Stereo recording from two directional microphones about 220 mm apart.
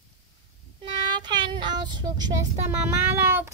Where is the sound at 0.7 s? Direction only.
20° right (ahead or behind).